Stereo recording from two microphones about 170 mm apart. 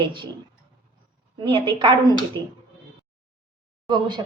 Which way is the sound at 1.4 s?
30° right (ahead or behind).